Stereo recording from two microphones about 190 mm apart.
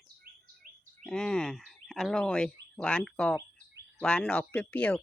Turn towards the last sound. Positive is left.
turn(degrees=5)  # may be behind; listen again after turning